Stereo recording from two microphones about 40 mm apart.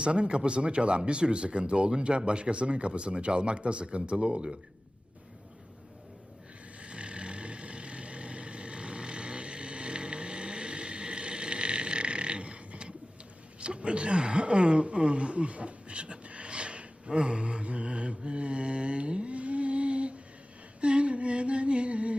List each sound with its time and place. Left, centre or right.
0.0 s speech: right
6.7 s vehicle: right
13.6 s speech: right